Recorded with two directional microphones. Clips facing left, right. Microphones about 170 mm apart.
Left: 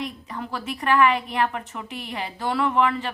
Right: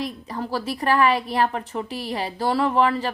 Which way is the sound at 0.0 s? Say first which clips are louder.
Right 3 dB; 35° right (ahead or behind).